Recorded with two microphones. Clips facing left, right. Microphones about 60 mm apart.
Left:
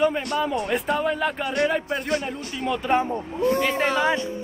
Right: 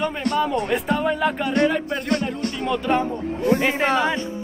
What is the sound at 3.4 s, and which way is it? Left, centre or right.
Speech, right.